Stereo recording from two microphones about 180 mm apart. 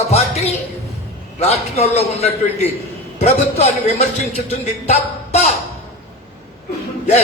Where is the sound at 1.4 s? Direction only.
35° left (ahead or behind).